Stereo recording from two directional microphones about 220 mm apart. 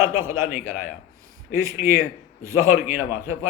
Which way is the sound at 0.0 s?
10° right (ahead or behind).